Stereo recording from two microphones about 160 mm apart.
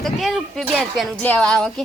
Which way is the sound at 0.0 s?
Centre (ahead or behind).